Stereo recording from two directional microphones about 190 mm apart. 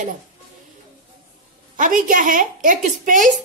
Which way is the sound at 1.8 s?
45° right (ahead or behind).